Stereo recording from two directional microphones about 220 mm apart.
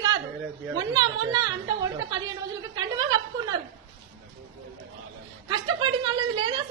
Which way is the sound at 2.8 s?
20° right (ahead or behind).